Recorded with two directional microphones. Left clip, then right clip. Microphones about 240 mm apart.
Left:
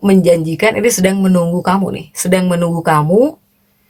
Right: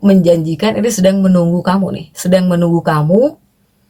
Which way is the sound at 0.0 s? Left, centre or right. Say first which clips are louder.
Even; left.